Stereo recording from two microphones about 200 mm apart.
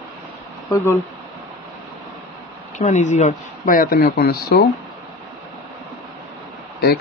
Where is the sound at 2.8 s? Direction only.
40° left (ahead or behind).